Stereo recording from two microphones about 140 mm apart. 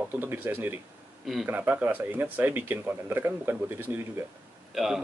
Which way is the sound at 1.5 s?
15° right (ahead or behind).